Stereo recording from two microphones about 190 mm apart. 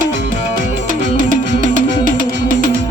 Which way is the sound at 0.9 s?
45° right (ahead or behind).